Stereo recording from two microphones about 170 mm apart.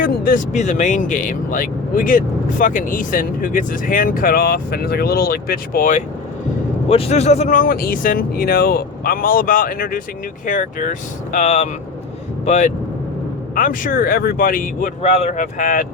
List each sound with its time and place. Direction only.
0.0 s speech: 50° left (ahead or behind)
6.8 s speech: 35° left (ahead or behind)